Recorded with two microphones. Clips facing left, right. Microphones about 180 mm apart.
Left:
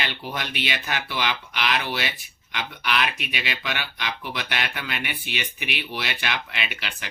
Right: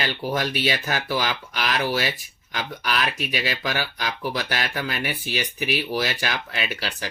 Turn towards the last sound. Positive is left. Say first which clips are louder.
# right 5 dB
turn(degrees=-40)  # may be behind; listen again after turning